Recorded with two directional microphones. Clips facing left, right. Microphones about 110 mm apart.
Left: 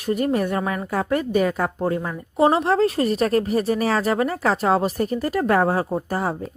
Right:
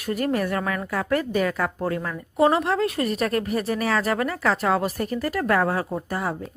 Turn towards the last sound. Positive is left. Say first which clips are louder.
# left 3 dB
turn(degrees=30)  # may be behind; listen again after turning